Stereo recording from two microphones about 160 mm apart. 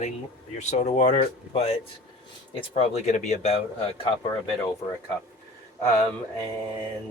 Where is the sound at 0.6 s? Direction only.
45° left (ahead or behind).